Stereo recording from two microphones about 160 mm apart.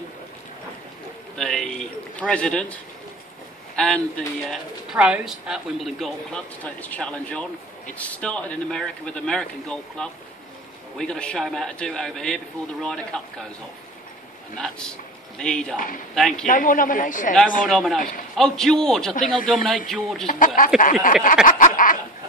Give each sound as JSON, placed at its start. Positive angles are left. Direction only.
{"t": 1.3, "sound": "speech", "side_deg": 5}
{"t": 3.7, "sound": "a sound", "side_deg": 5}
{"t": 4.5, "sound": "speech", "side_deg": -5}
{"t": 14.6, "sound": "a man's voice", "side_deg": 5}
{"t": 16.4, "sound": "a man's voice", "side_deg": 55}
{"t": 17.6, "sound": "speech", "side_deg": 0}
{"t": 20.2, "sound": "a man's voice", "side_deg": 60}
{"t": 21.5, "sound": "snicker", "side_deg": 55}